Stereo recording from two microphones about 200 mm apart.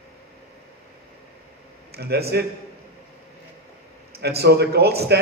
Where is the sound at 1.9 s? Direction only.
55° right (ahead or behind).